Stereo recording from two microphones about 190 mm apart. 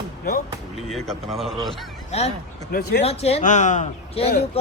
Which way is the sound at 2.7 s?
55° left (ahead or behind).